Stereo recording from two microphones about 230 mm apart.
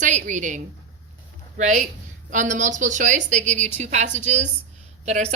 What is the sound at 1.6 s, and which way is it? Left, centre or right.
A woman's voice, right.